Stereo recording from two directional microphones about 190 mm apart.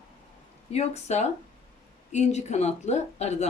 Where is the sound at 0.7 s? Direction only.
35° left (ahead or behind).